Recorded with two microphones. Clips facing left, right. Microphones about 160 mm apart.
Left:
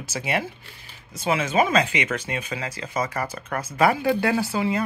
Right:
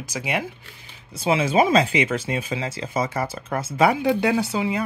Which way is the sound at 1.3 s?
30° right (ahead or behind).